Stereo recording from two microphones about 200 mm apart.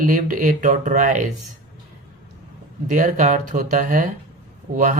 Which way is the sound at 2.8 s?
40° right (ahead or behind).